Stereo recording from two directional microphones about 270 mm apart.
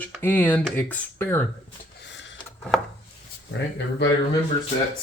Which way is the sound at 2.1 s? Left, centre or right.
Left.